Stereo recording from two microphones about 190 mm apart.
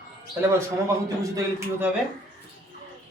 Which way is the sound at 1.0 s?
15° right (ahead or behind).